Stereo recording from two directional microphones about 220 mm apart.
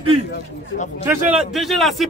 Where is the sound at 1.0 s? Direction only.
Centre (ahead or behind).